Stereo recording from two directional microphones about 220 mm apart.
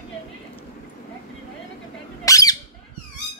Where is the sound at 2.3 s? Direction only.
15° left (ahead or behind).